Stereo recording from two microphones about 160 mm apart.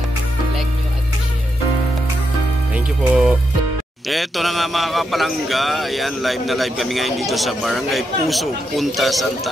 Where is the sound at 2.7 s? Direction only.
10° right (ahead or behind).